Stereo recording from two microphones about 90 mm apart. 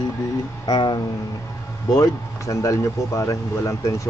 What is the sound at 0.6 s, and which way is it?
Speech, 55° left (ahead or behind).